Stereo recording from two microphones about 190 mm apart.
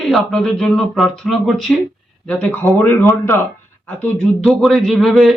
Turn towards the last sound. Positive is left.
turn(degrees=0)  # may be behind; listen again after turning